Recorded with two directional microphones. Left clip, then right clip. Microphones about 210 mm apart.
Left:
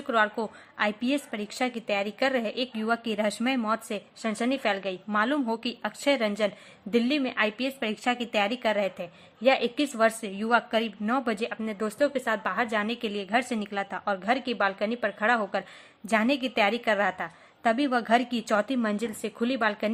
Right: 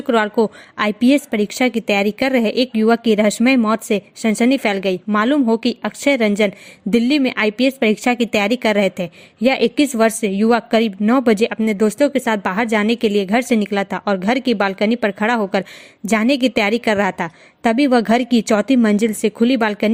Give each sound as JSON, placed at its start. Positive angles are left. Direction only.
{"t": 0.1, "sound": "a woman's voice", "side_deg": -40}